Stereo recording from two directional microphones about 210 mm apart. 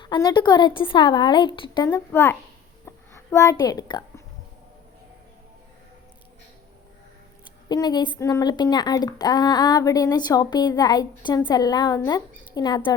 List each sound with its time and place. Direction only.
0.0 s speech: 20° left (ahead or behind)
2.8 s a sound: 10° left (ahead or behind)
7.7 s speech: 20° left (ahead or behind)